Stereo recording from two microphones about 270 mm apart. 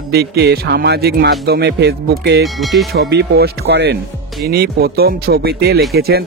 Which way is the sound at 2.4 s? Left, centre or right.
Centre.